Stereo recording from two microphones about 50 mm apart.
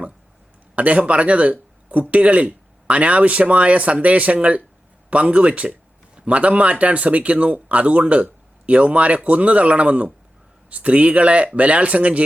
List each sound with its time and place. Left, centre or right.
0.8 s speech: right